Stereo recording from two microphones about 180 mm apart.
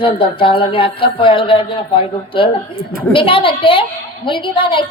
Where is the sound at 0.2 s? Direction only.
30° left (ahead or behind).